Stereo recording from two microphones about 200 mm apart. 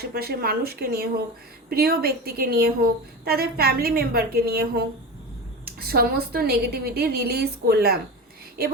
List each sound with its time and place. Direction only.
0.0 s a woman's voice: 50° right (ahead or behind)